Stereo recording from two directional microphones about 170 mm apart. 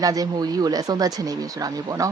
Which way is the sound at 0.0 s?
20° right (ahead or behind).